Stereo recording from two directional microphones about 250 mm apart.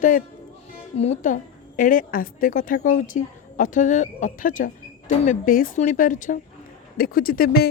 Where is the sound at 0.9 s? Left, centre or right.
Left.